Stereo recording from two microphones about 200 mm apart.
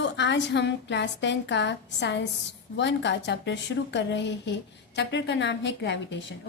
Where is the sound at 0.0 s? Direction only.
60° left (ahead or behind).